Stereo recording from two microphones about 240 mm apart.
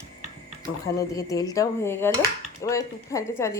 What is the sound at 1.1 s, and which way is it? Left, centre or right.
Speech, centre.